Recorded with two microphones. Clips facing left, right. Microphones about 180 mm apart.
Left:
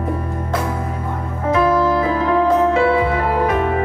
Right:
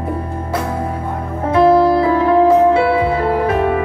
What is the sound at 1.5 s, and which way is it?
Music, 35° right (ahead or behind).